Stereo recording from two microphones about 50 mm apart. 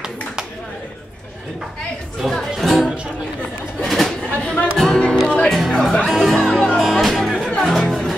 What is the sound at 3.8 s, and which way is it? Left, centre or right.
Chatter, centre.